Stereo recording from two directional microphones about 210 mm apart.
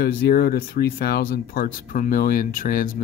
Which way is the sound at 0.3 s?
45° left (ahead or behind).